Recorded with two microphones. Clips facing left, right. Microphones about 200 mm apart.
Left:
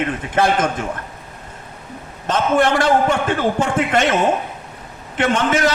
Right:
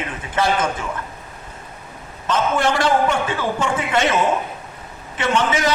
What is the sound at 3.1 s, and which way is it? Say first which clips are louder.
A man's voice: left 3 dB; 55° left (ahead or behind).